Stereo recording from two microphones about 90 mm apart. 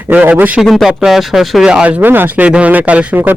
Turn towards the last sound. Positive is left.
turn(degrees=-15)  # may be behind; listen again after turning